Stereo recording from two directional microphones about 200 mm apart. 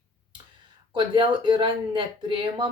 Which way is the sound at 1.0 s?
25° right (ahead or behind).